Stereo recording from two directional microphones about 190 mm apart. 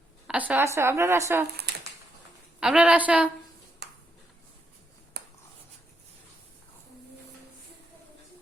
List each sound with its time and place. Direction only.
0.3 s a woman's voice: 10° right (ahead or behind)
2.6 s a woman's voice: 5° right (ahead or behind)
5.2 s writing: 60° right (ahead or behind)